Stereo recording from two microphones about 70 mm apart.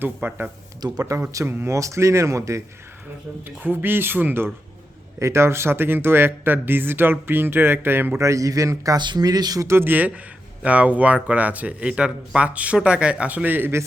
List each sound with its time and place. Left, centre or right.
0.0 s speech: right
0.8 s speech: right
1.5 s speech: right
3.6 s speech: right
5.2 s speech: right
8.2 s speech: right
9.0 s speech: right
9.6 s speech: right